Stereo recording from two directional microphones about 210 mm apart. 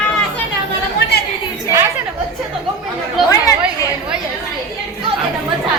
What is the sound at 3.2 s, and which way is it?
Speech, centre (ahead or behind).